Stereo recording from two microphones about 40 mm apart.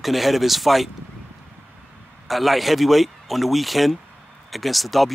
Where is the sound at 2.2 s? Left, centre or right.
Centre.